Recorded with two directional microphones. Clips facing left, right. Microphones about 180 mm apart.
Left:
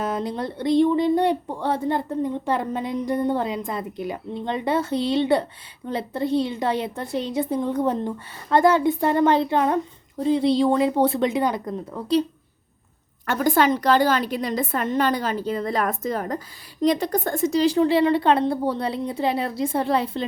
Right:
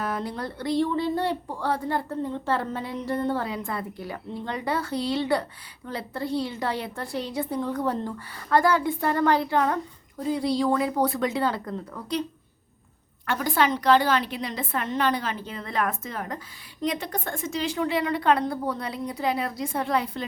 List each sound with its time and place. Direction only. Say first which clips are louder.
0.0 s speech: left 4 dB; 20° left (ahead or behind)
13.2 s a woman's voice: left 5 dB; 45° left (ahead or behind); by 20.2 s 30° left (ahead or behind)